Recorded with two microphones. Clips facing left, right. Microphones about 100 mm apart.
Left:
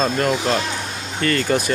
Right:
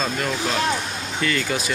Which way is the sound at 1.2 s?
45° left (ahead or behind).